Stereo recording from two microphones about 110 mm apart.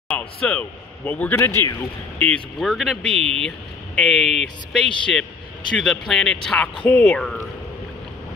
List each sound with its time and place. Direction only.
0.1 s speech: 10° left (ahead or behind)
2.6 s speech: centre (ahead or behind)
3.1 s speech: 65° right (ahead or behind)
3.4 s speech: 5° left (ahead or behind)